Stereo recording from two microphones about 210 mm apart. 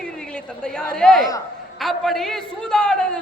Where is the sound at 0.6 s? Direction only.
5° left (ahead or behind).